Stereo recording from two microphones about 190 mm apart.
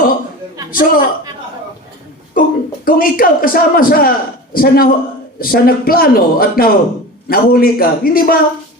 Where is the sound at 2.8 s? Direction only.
50° left (ahead or behind).